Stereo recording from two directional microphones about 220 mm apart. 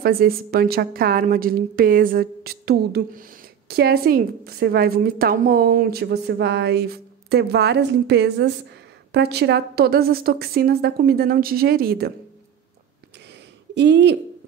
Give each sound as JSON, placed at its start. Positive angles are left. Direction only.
{"t": 0.0, "sound": "a woman's voice", "side_deg": -45}
{"t": 13.7, "sound": "a woman's voice", "side_deg": -50}